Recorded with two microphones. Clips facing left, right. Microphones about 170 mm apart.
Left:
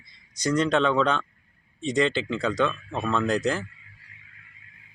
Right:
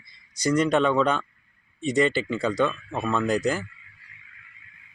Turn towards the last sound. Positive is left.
turn(degrees=-5)  # may be behind; listen again after turning